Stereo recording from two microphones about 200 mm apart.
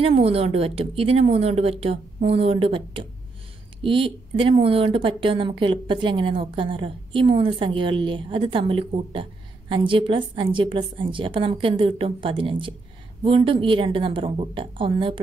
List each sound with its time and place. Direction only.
0.0 s speech: 30° right (ahead or behind)